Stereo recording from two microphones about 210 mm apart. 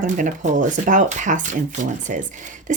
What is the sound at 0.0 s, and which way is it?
A woman's voice, 35° right (ahead or behind).